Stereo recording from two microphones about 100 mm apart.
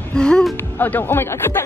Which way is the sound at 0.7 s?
20° left (ahead or behind).